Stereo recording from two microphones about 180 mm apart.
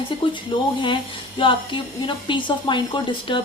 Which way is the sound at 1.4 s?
30° left (ahead or behind).